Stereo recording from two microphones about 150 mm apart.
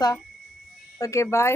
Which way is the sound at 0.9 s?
20° left (ahead or behind).